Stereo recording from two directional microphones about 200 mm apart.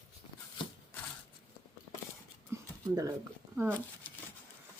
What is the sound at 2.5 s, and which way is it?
Dog, 15° right (ahead or behind).